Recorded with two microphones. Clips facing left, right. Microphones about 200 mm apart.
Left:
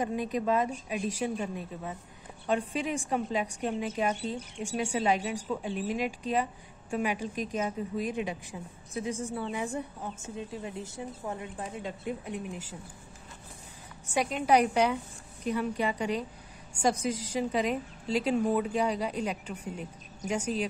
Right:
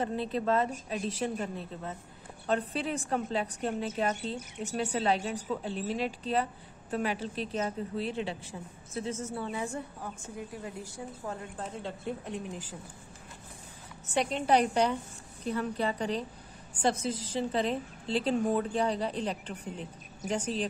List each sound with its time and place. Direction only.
0.0 s speech: 15° left (ahead or behind)
14.0 s speech: 10° left (ahead or behind)